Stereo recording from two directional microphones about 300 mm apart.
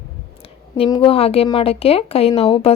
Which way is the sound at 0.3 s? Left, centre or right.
Centre.